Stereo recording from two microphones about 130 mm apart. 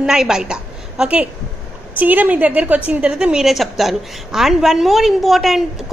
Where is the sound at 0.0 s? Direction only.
5° right (ahead or behind).